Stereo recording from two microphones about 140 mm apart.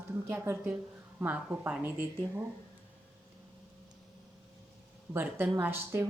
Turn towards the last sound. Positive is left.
turn(degrees=-15)  # may be behind; listen again after turning